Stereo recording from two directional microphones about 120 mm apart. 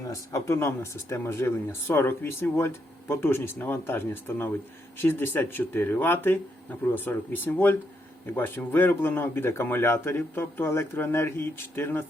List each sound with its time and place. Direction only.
0.1 s speech: 25° left (ahead or behind)